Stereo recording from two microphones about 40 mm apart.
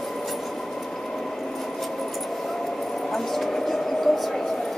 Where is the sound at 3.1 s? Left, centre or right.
Centre.